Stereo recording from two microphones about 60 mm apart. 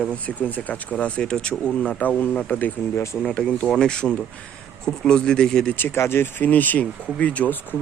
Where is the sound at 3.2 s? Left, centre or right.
Centre.